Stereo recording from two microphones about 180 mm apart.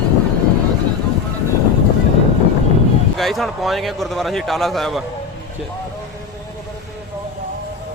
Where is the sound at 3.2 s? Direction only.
Centre (ahead or behind).